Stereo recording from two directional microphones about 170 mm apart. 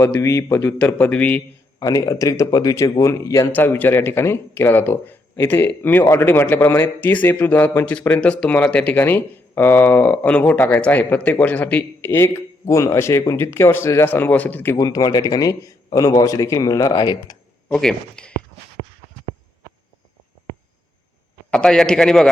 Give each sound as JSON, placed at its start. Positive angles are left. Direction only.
{"t": 0.0, "sound": "speech", "side_deg": 15}
{"t": 1.8, "sound": "speech", "side_deg": 20}
{"t": 17.7, "sound": "a man's voice", "side_deg": 5}
{"t": 21.5, "sound": "a man's voice", "side_deg": 5}